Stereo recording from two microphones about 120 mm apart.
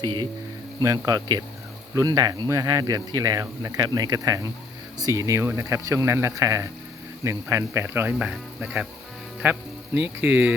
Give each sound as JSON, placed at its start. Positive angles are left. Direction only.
{"t": 0.8, "sound": "speech", "side_deg": -30}